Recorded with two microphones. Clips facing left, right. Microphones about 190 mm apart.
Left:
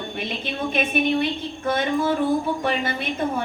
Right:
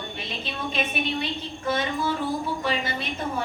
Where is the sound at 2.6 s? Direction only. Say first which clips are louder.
Left 3 dB; 55° left (ahead or behind).